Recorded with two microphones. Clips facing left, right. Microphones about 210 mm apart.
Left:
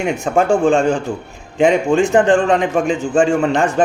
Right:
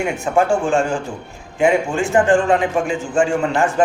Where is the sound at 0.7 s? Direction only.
20° left (ahead or behind).